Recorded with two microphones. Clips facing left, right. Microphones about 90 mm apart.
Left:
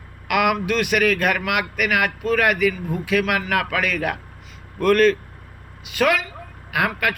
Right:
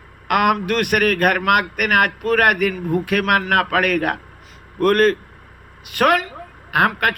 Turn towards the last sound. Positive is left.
turn(degrees=-50)  # may be behind; listen again after turning